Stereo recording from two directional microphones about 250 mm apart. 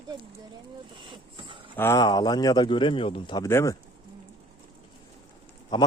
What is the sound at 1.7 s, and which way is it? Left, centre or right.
Speech, centre.